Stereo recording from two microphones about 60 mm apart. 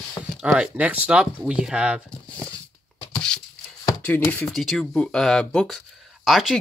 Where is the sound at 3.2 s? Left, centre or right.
Centre.